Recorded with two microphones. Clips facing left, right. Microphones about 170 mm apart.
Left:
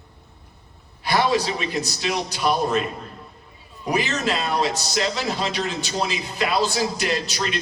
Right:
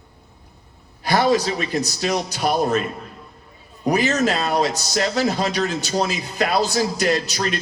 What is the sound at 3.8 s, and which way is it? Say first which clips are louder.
A man's voice: right 5 dB; 40° right (ahead or behind).